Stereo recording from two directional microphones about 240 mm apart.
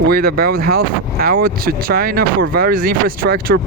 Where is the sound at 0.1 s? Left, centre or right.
Right.